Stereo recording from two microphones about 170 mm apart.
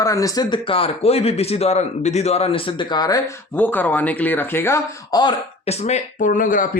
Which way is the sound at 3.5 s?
10° left (ahead or behind).